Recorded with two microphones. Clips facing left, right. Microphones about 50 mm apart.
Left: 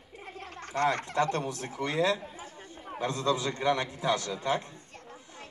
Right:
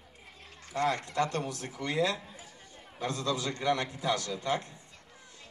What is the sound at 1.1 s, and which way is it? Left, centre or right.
A man's voice, left.